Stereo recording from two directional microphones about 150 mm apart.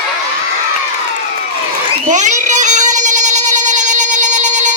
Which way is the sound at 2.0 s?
55° right (ahead or behind).